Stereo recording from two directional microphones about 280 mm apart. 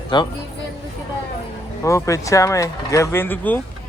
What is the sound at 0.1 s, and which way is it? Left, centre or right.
Speech, centre.